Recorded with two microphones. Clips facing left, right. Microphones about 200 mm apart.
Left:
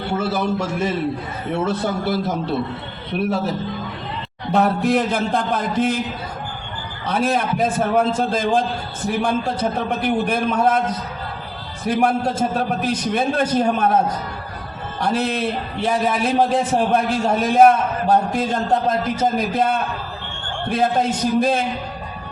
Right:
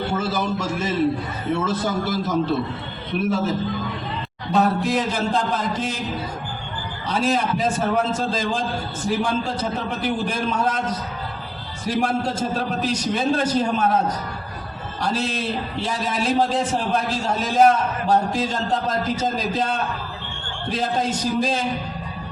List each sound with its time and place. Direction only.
0.2 s a man's voice: 60° left (ahead or behind)
4.5 s a man's voice: 60° left (ahead or behind)
7.1 s a man's voice: 55° left (ahead or behind)
11.9 s a man's voice: 55° left (ahead or behind)
15.0 s a man's voice: 55° left (ahead or behind)